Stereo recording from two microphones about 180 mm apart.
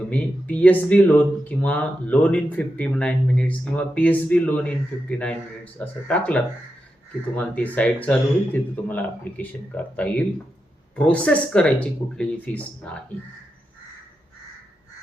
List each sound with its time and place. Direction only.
0.1 s speech: 5° left (ahead or behind)